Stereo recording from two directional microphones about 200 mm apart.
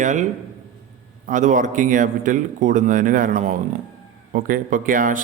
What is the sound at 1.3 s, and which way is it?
A man's voice, 40° right (ahead or behind).